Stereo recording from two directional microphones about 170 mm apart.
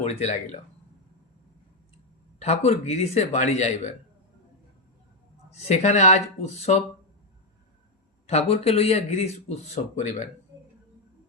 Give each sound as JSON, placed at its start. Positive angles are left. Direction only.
{"t": 0.0, "sound": "speech", "side_deg": 40}
{"t": 2.6, "sound": "speech", "side_deg": 40}
{"t": 5.5, "sound": "speech", "side_deg": 40}
{"t": 8.3, "sound": "speech", "side_deg": 40}